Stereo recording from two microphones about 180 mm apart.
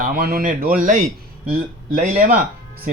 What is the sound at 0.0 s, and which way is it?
Speech, 55° right (ahead or behind).